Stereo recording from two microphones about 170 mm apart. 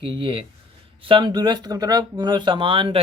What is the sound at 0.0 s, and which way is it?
Speech, 30° right (ahead or behind).